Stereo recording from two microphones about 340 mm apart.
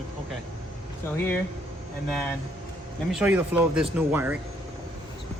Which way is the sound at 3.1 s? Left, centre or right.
Centre.